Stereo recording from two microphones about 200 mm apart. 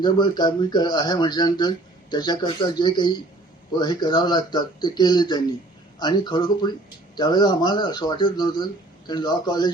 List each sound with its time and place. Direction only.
0.0 s speech: 20° left (ahead or behind)